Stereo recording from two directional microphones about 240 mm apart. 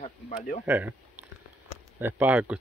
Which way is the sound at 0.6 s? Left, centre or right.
Centre.